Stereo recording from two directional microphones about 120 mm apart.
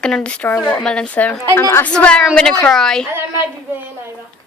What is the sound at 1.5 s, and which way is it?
A woman's voice, 20° left (ahead or behind).